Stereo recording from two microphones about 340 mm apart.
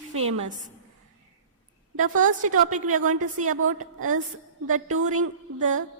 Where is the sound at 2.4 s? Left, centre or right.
Right.